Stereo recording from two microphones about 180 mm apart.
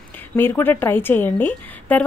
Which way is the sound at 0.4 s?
10° left (ahead or behind).